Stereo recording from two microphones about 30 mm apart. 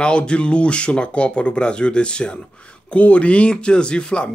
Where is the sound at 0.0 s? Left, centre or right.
Left.